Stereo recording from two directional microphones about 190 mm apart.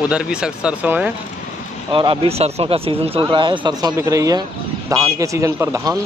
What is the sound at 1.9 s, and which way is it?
Speech, 25° right (ahead or behind).